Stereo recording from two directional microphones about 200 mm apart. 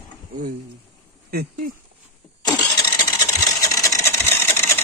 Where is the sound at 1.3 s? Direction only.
45° right (ahead or behind).